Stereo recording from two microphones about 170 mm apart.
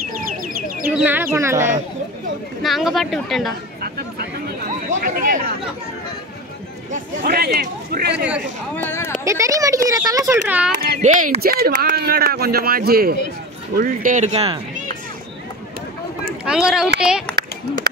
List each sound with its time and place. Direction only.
0.1 s bird: 55° right (ahead or behind)
0.8 s speech: 10° right (ahead or behind)
2.6 s speech: centre (ahead or behind)
3.8 s a sound: 65° right (ahead or behind)
5.0 s speech: 55° right (ahead or behind)
6.9 s speech: 60° right (ahead or behind)
8.7 s speech: 15° left (ahead or behind)
9.2 s speech: 20° right (ahead or behind)
11.0 s speech: 50° right (ahead or behind)
13.7 s speech: 50° right (ahead or behind)
16.4 s speech: 5° right (ahead or behind)